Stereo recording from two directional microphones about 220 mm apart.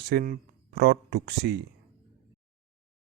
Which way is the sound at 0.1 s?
45° right (ahead or behind).